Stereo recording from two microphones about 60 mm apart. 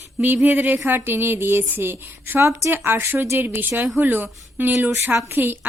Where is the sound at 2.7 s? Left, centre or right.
Right.